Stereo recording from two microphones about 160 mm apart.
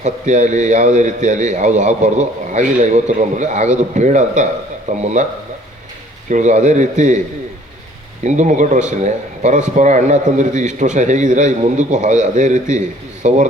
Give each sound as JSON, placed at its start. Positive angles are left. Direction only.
{"t": 0.0, "sound": "a man's voice", "side_deg": -50}
{"t": 6.2, "sound": "a man's voice", "side_deg": -50}
{"t": 8.2, "sound": "a man's voice", "side_deg": -50}